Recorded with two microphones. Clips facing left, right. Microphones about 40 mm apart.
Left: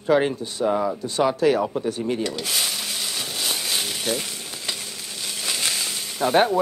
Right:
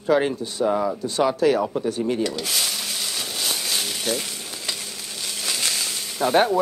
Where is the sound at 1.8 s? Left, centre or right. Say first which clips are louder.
Right 2 dB; left.